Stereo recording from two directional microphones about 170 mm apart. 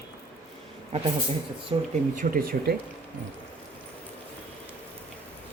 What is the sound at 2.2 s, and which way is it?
Speech, 60° right (ahead or behind).